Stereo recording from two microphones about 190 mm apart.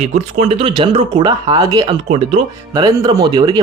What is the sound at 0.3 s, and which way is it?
Speech, 30° right (ahead or behind).